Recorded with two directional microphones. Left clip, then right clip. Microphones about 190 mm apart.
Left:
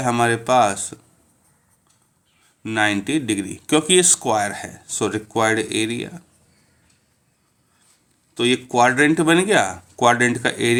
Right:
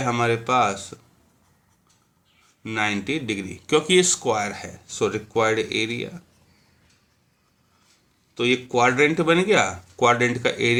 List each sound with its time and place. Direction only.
0.0 s speech: 45° left (ahead or behind)
2.6 s speech: 45° left (ahead or behind)
8.4 s speech: 45° left (ahead or behind)